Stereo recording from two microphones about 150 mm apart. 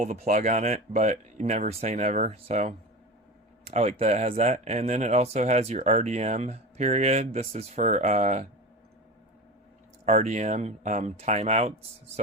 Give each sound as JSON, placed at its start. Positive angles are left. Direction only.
{"t": 0.0, "sound": "speech", "side_deg": -55}
{"t": 10.1, "sound": "speech", "side_deg": -50}